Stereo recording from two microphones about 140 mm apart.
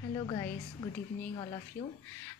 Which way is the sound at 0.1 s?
30° left (ahead or behind).